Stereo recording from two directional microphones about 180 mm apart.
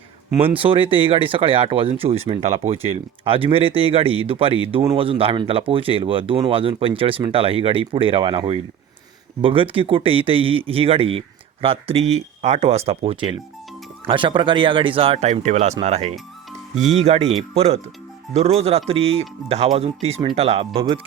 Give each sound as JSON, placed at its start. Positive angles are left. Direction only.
{"t": 0.4, "sound": "speech", "side_deg": -30}
{"t": 16.1, "sound": "music", "side_deg": 0}
{"t": 17.0, "sound": "speech", "side_deg": -35}